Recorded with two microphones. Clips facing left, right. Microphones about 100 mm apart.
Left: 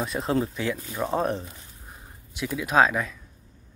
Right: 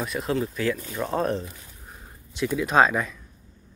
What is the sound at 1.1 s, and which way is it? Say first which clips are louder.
Speech: right 1 dB; 15° left (ahead or behind).